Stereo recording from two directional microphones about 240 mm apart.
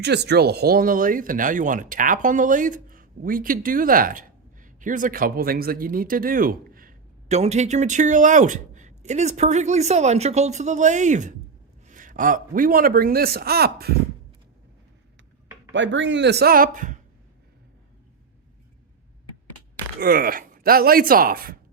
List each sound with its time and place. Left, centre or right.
0.0 s speech: right
15.7 s speech: right
20.0 s speech: right